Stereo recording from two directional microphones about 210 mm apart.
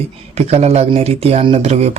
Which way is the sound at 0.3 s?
30° right (ahead or behind).